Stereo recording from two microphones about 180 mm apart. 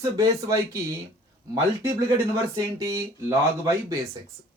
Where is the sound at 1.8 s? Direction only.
15° right (ahead or behind).